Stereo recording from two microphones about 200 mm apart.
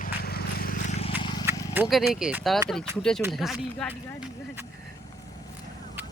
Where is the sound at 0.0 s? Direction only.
50° left (ahead or behind).